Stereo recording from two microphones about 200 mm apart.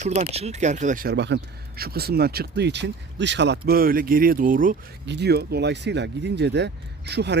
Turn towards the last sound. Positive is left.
turn(degrees=-55)  # may be behind; listen again after turning